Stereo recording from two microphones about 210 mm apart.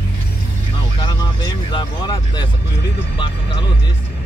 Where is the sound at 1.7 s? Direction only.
20° left (ahead or behind).